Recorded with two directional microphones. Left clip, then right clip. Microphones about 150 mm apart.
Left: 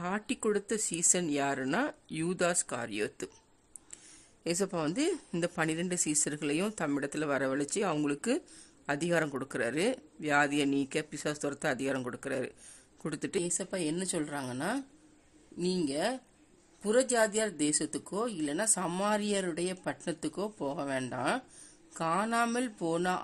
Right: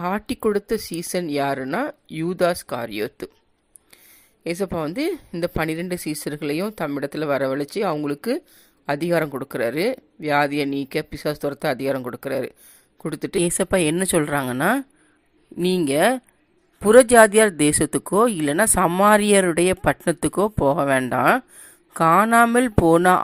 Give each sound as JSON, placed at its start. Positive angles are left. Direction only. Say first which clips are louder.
{"t": 0.0, "sound": "speech", "louder": "right 10 dB", "side_deg": -25}
{"t": 4.4, "sound": "a woman's voice", "louder": "right 7 dB", "side_deg": -15}
{"t": 13.4, "sound": "speech", "louder": "right 15 dB", "side_deg": -50}